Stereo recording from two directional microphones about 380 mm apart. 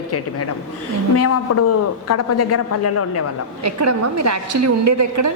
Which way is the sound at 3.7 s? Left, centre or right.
Right.